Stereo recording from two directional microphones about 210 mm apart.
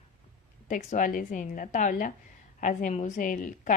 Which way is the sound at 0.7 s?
35° left (ahead or behind).